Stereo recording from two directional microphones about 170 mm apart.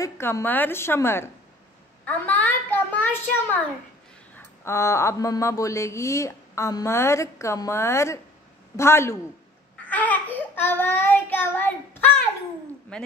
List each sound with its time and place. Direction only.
0.0 s speech: 15° left (ahead or behind)
9.8 s child singing: 10° left (ahead or behind)
12.9 s speech: 5° left (ahead or behind)